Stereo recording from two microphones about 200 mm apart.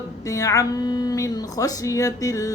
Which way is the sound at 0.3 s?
15° left (ahead or behind).